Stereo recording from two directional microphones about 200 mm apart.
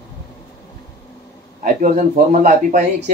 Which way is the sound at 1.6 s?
40° right (ahead or behind).